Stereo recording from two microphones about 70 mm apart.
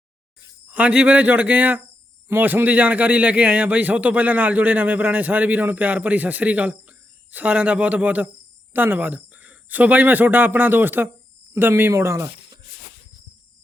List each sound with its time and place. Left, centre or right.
0.7 s a man's voice: centre; by 12.3 s right